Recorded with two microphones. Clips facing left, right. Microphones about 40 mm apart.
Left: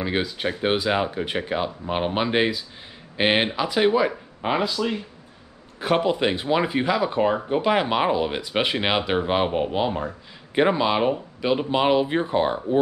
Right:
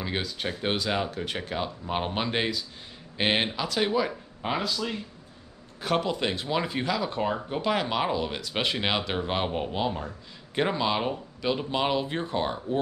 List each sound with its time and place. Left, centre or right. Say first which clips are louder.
0.0 s speech: left 6 dB; centre